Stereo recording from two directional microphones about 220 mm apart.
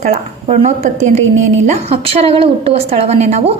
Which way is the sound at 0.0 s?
30° right (ahead or behind).